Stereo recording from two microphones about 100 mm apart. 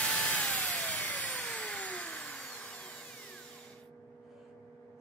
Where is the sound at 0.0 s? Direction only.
10° left (ahead or behind).